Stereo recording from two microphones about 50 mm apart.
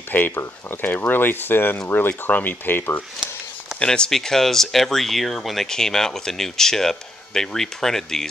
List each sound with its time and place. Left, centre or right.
0.1 s speech: left
3.8 s speech: centre